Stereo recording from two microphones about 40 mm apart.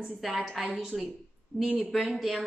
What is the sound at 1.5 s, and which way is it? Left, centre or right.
Speech, centre.